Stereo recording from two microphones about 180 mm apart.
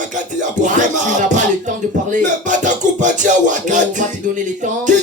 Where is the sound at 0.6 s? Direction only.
45° right (ahead or behind).